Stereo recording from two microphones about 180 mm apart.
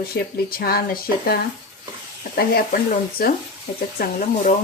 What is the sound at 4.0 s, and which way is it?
Speech, 60° left (ahead or behind).